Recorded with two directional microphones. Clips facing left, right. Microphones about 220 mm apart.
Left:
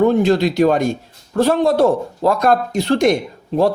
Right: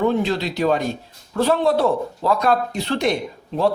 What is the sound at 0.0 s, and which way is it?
Speech, 45° left (ahead or behind).